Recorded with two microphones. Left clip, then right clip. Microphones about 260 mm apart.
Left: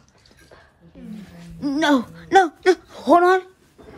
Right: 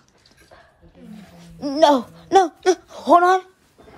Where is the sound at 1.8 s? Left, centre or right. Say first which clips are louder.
Right 5 dB; left.